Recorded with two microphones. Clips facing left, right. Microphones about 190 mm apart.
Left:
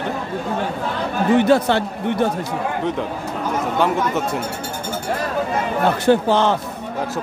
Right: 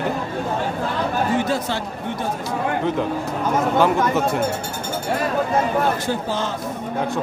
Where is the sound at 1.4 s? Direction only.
65° left (ahead or behind).